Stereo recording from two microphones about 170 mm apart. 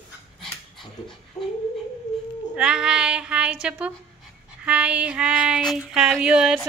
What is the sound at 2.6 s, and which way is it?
Speech, 5° right (ahead or behind).